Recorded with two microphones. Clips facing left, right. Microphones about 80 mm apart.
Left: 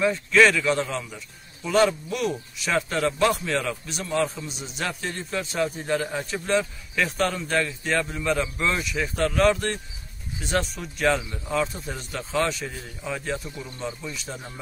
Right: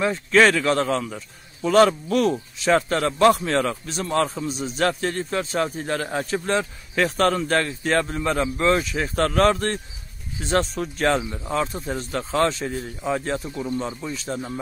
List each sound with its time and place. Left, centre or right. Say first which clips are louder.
0.0 s a man's voice: right 1 dB; right
9.1 s a man's voice: right 2 dB; right